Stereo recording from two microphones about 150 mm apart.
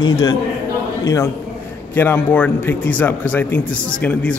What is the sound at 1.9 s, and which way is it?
A man's voice, 15° left (ahead or behind).